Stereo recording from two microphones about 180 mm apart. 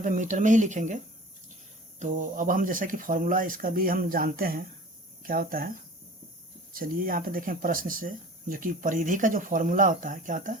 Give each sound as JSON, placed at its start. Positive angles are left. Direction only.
{"t": 0.0, "sound": "speech", "side_deg": -45}
{"t": 2.0, "sound": "speech", "side_deg": -45}
{"t": 6.7, "sound": "speech", "side_deg": -50}